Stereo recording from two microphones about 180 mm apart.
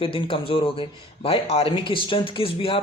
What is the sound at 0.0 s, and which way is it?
Speech, 30° left (ahead or behind).